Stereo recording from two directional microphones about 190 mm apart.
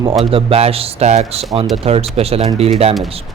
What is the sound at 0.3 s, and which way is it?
Speech, 30° right (ahead or behind).